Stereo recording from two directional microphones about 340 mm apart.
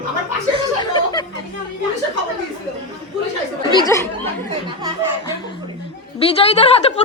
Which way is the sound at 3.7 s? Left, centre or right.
Centre.